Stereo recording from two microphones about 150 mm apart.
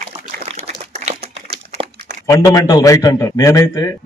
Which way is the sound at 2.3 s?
20° left (ahead or behind).